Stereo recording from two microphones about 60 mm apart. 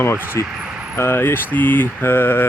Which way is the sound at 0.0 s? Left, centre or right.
Left.